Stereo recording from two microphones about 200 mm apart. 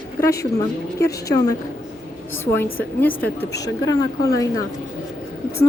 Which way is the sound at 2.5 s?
10° left (ahead or behind).